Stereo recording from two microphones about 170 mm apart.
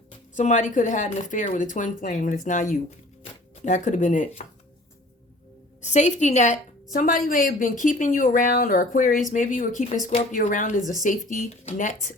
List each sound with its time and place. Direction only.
0.3 s a woman's voice: 45° left (ahead or behind)
5.8 s a woman's voice: 45° left (ahead or behind)